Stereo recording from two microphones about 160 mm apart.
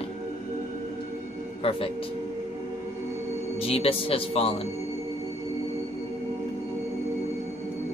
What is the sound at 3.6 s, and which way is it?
Speech, 35° left (ahead or behind).